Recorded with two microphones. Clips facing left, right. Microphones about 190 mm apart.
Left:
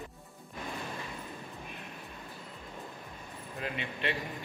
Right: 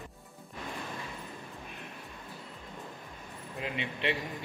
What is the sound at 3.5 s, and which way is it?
Speech, 20° right (ahead or behind).